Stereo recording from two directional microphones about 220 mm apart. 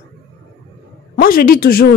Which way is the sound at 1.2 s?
40° left (ahead or behind).